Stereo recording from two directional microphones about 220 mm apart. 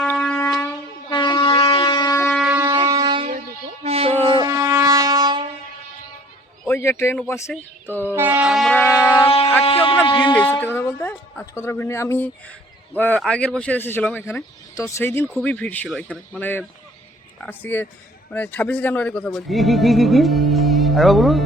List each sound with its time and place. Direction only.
0.0 s shofar: 5° left (ahead or behind)
1.1 s shofar: 20° left (ahead or behind)
2.3 s shofar: 10° right (ahead or behind)
2.7 s a sound: 20° right (ahead or behind)
4.3 s shofar: 20° right (ahead or behind)
6.7 s speech: 10° left (ahead or behind)
8.1 s a sound: 10° right (ahead or behind); by 9.3 s 10° left (ahead or behind)
10.3 s speech: 10° left (ahead or behind)